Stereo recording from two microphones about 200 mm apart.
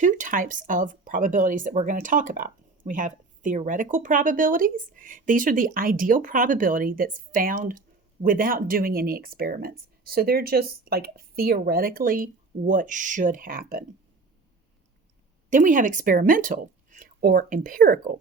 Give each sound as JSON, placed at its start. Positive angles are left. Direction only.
{"t": 0.0, "sound": "speech", "side_deg": -40}
{"t": 15.4, "sound": "speech", "side_deg": -40}